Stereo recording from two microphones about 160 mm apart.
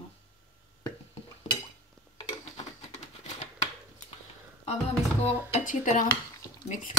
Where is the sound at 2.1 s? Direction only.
40° left (ahead or behind).